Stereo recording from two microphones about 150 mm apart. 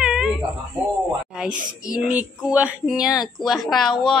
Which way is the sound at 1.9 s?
5° right (ahead or behind).